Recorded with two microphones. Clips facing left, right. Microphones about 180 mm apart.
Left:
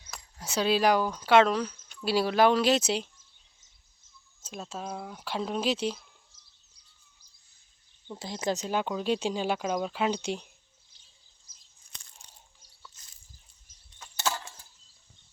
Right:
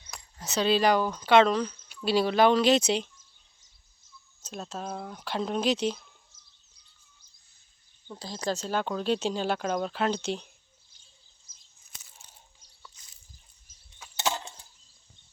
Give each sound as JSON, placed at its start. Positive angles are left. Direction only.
{"t": 0.0, "sound": "speech", "side_deg": 10}
{"t": 4.4, "sound": "speech", "side_deg": 10}
{"t": 8.2, "sound": "speech", "side_deg": 20}
{"t": 11.9, "sound": "crunch", "side_deg": -5}
{"t": 14.2, "sound": "a sound", "side_deg": -20}